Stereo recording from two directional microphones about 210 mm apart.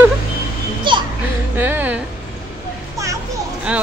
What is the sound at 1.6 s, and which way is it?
Speech, 10° right (ahead or behind).